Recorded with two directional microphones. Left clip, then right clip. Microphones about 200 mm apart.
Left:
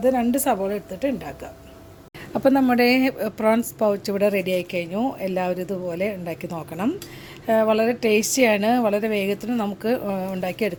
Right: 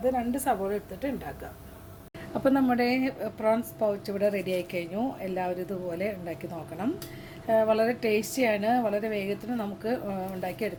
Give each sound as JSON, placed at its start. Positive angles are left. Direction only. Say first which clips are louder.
{"t": 0.0, "sound": "a woman's voice", "louder": "left 7 dB", "side_deg": 45}
{"t": 2.3, "sound": "a woman's voice", "louder": "left 6 dB", "side_deg": 25}